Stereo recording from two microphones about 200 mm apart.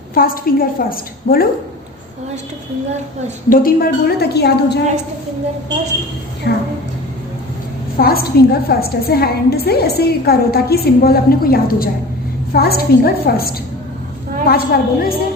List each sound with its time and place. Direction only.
0.1 s a woman's voice: 45° left (ahead or behind)
3.5 s a woman's voice: 45° left (ahead or behind)
6.5 s a woman's voice: 60° left (ahead or behind)
7.9 s a woman's voice: 50° left (ahead or behind)